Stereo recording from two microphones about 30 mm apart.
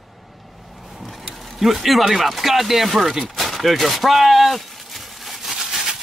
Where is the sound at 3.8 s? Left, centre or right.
Centre.